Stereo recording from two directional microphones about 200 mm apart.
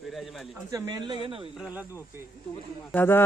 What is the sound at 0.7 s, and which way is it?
Speech, 20° right (ahead or behind).